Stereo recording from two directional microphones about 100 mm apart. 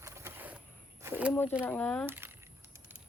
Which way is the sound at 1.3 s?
20° left (ahead or behind).